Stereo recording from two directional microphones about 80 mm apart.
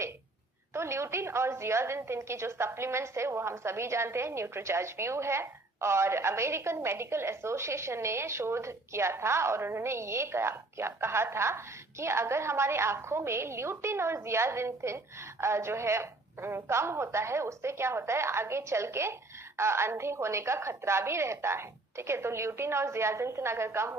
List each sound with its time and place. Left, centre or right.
0.7 s a woman's voice: right